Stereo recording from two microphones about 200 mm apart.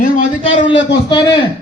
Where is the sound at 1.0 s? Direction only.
25° left (ahead or behind).